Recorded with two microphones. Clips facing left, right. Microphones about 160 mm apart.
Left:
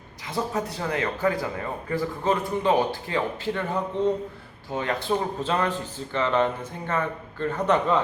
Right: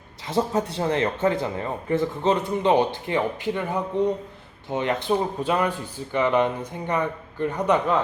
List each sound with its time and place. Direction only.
0.3 s speech: 30° right (ahead or behind); by 7.9 s 10° right (ahead or behind)